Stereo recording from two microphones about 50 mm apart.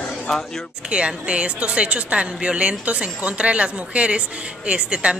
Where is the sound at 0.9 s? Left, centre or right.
Centre.